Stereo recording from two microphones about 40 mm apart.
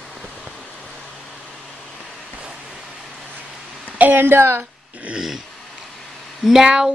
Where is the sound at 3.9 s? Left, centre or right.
Right.